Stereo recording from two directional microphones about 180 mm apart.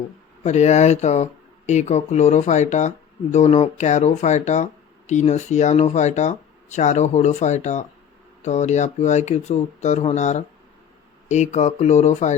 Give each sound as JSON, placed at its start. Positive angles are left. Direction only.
{"t": 0.4, "sound": "speech", "side_deg": 40}